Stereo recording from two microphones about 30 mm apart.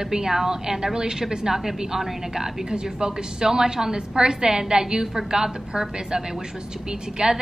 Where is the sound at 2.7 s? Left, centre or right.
Right.